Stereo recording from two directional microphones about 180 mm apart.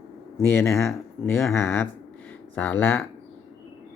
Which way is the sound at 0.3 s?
15° left (ahead or behind).